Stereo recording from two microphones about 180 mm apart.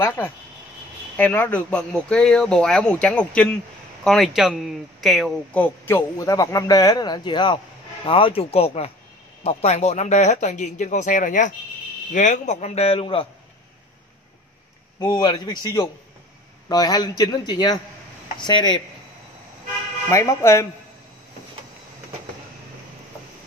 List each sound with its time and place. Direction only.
1.1 s speech: 10° left (ahead or behind); by 13.3 s 30° left (ahead or behind)
15.0 s speech: 25° left (ahead or behind)
20.1 s speech: 15° left (ahead or behind)